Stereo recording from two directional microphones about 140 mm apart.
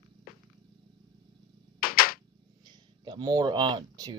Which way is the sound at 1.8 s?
90° left.